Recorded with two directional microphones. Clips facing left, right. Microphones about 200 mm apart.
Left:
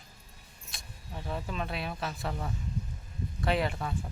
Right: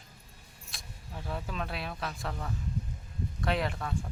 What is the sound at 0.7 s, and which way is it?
Speech, centre (ahead or behind).